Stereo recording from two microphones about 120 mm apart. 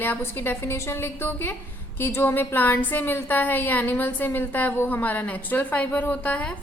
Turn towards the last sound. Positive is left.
turn(degrees=10)  # may be behind; listen again after turning